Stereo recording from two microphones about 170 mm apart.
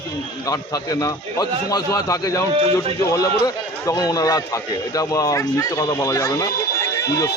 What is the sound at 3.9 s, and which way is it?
A man's voice, 20° left (ahead or behind).